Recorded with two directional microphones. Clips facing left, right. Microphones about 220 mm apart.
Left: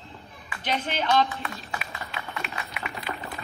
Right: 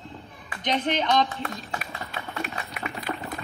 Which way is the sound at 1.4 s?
45° right (ahead or behind).